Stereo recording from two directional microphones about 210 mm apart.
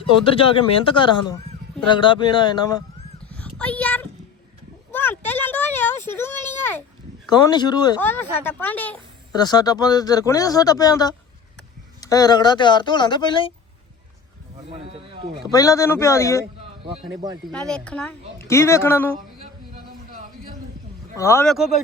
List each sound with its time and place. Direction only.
0.3 s speech: 25° left (ahead or behind)
3.2 s a sound: 5° left (ahead or behind)
3.6 s speech: 5° left (ahead or behind)
4.9 s a sound: 10° left (ahead or behind)
7.3 s speech: 20° left (ahead or behind)
8.0 s speech: 10° left (ahead or behind)
9.3 s speech: 20° left (ahead or behind)
14.7 s speech: 30° right (ahead or behind)
15.4 s speech: 15° left (ahead or behind)
17.4 s speech: 5° left (ahead or behind)
21.2 s speech: 15° left (ahead or behind)
21.4 s speech: centre (ahead or behind)